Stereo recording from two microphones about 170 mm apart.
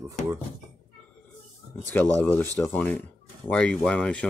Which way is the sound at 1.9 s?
10° left (ahead or behind).